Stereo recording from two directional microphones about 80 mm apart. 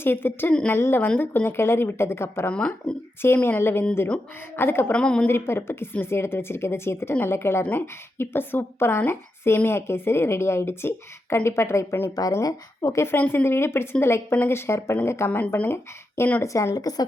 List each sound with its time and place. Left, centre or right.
0.0 s a woman's voice: left
2.5 s a woman's voice: centre
3.2 s speech: left
4.9 s a woman's voice: centre
5.3 s a woman's voice: left
13.1 s a woman's voice: left
15.3 s speech: left
16.4 s speech: left